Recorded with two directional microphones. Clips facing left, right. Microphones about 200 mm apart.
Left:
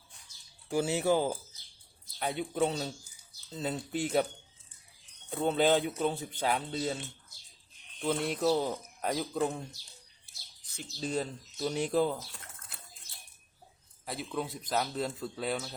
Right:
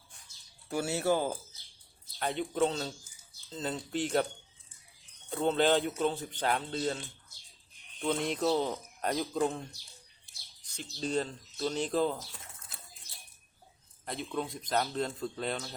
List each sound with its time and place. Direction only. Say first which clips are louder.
0.7 s speech: left 2 dB; 15° left (ahead or behind)
5.5 s speech: even; 10° left (ahead or behind)
10.8 s speech: right 1 dB; 5° left (ahead or behind)
14.0 s speech: even; 5° left (ahead or behind)